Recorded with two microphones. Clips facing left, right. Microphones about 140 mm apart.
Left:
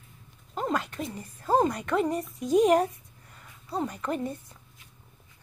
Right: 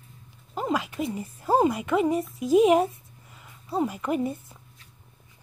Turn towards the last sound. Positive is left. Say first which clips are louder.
# right 4 dB
turn(degrees=-10)  # may be behind; listen again after turning